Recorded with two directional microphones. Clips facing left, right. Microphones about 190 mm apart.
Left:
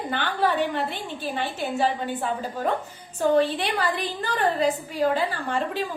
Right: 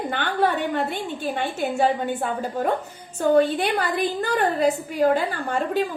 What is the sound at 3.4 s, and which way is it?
A woman's voice, 45° right (ahead or behind).